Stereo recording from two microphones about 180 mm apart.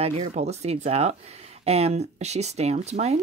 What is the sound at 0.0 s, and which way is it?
A woman's voice, 35° right (ahead or behind).